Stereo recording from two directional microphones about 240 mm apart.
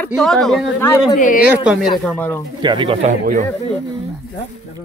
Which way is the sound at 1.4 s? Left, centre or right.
Centre.